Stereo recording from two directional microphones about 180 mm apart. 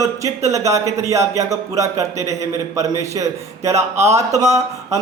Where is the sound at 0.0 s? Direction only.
15° right (ahead or behind).